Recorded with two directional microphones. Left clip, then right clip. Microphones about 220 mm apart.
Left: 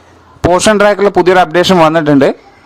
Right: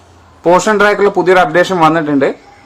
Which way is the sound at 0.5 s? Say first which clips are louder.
Left 1 dB; 45° left (ahead or behind).